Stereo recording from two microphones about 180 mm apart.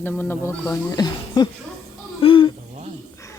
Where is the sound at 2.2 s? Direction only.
30° left (ahead or behind).